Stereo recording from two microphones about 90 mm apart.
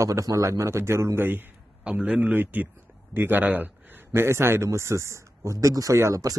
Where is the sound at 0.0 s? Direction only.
40° right (ahead or behind).